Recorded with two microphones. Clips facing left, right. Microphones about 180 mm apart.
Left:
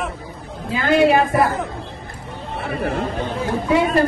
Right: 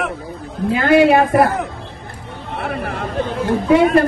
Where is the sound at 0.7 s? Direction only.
60° right (ahead or behind).